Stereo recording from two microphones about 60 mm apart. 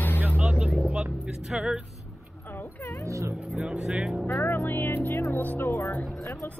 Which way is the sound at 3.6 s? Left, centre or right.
Centre.